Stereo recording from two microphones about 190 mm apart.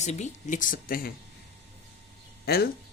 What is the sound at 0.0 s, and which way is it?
Speech, 35° left (ahead or behind).